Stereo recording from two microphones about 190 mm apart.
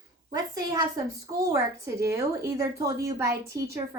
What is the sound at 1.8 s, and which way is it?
A woman's voice, 15° right (ahead or behind).